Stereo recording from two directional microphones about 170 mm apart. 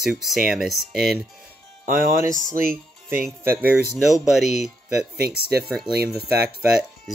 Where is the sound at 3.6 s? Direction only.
5° right (ahead or behind).